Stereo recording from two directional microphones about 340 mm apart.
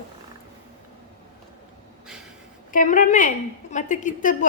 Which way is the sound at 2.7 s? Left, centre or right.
Left.